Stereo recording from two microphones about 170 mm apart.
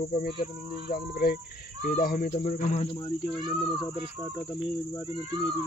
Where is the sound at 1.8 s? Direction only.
60° left (ahead or behind); by 2.9 s 40° left (ahead or behind).